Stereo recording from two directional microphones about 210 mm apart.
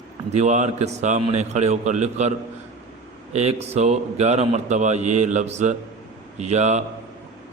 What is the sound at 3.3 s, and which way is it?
A man's voice, 30° right (ahead or behind).